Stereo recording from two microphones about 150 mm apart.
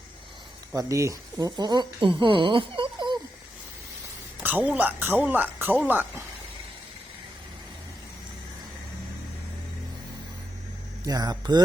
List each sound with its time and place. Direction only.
0.7 s speech: 20° right (ahead or behind)
4.4 s speech: 10° right (ahead or behind)
11.0 s speech: 25° right (ahead or behind)